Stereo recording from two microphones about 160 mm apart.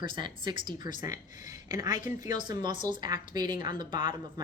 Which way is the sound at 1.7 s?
20° right (ahead or behind).